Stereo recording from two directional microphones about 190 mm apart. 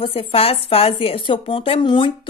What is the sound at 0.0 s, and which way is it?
Speech, 30° left (ahead or behind).